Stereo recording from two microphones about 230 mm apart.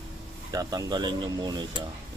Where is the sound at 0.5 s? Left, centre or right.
Centre.